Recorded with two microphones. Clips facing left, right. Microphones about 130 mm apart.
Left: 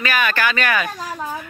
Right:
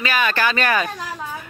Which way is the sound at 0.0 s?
25° right (ahead or behind).